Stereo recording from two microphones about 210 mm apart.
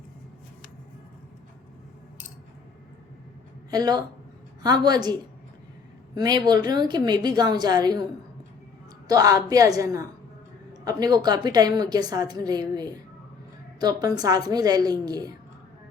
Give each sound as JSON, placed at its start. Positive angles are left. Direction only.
{"t": 3.7, "sound": "a woman's voice", "side_deg": -20}
{"t": 6.1, "sound": "a woman's voice", "side_deg": -20}
{"t": 9.0, "sound": "a woman's voice", "side_deg": -15}